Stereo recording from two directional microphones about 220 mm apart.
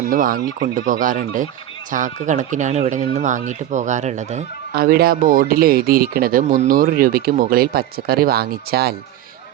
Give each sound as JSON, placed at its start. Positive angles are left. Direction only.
{"t": 0.1, "sound": "speech", "side_deg": -40}
{"t": 4.7, "sound": "speech", "side_deg": -45}